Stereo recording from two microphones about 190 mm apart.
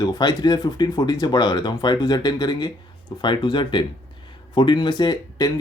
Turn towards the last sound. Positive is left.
turn(degrees=20)  # may be behind; listen again after turning